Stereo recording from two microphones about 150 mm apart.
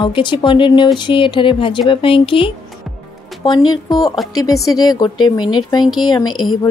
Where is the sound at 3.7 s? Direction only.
25° left (ahead or behind).